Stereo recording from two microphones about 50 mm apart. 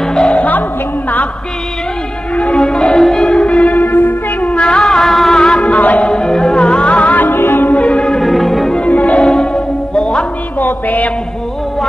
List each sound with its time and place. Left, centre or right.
0.0 s music: centre
0.4 s music: left
2.3 s music: left
4.6 s music: centre
5.7 s chant: left
6.0 s music: centre; by 7.7 s left
7.7 s music: left
8.2 s music: centre
8.7 s music: left
10.6 s music: left